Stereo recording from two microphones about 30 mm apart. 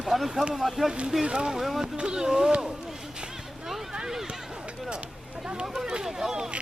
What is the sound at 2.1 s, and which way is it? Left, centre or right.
Speech, centre.